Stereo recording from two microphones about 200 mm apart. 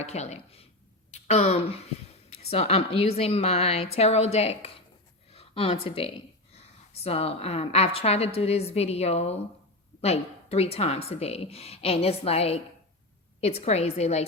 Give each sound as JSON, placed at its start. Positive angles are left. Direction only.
{"t": 0.0, "sound": "a woman's voice", "side_deg": 35}